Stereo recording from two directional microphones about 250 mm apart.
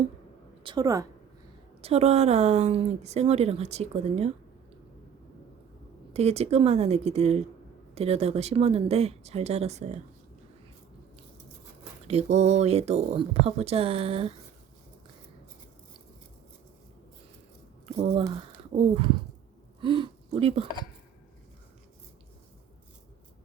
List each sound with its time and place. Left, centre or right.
0.6 s a woman's voice: centre
6.1 s speech: right
12.0 s speech: right
17.9 s speech: right